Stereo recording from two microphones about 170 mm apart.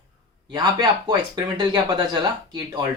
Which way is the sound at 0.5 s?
25° right (ahead or behind).